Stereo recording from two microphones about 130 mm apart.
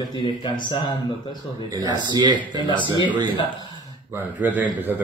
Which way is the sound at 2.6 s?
40° left (ahead or behind).